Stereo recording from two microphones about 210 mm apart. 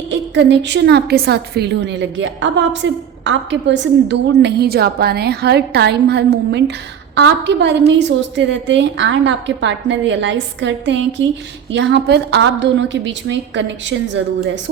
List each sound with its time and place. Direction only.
0.1 s a woman's voice: 55° right (ahead or behind)